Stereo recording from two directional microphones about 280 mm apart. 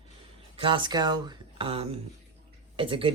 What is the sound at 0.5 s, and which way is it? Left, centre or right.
Speech, centre.